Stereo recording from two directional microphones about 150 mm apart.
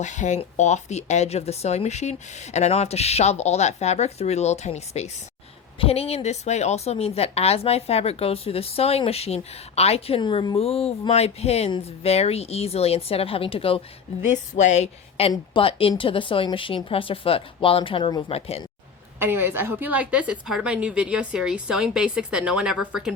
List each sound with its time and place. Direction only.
0.0 s speech: 55° left (ahead or behind)
10.2 s a woman's voice: 30° left (ahead or behind)
10.6 s a woman's voice: 40° left (ahead or behind)
14.5 s speech: 50° left (ahead or behind)
15.3 s a woman's voice: 35° left (ahead or behind)
19.2 s a woman's voice: 15° right (ahead or behind)